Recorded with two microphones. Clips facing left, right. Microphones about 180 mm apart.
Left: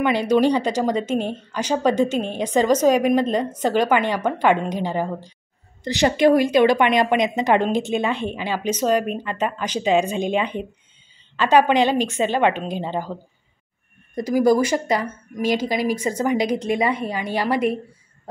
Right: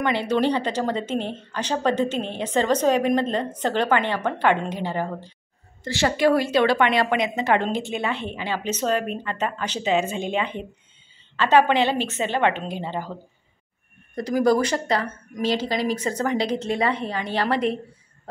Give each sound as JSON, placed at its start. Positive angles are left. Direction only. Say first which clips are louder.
{"t": 0.3, "sound": "speech", "louder": "left 5 dB", "side_deg": 10}
{"t": 14.1, "sound": "speech", "louder": "left 3 dB", "side_deg": 10}